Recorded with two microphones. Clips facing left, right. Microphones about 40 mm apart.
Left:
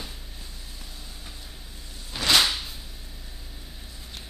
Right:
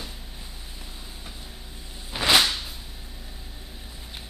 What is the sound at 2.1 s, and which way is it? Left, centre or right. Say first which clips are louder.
Whip: right 2 dB; centre.